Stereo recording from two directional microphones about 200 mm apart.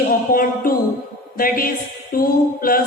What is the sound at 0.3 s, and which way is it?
A woman's voice, 40° left (ahead or behind).